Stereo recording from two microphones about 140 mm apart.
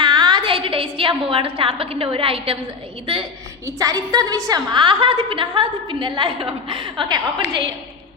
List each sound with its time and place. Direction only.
0.0 s a woman's voice: 30° right (ahead or behind)
3.7 s a woman's voice: 25° right (ahead or behind)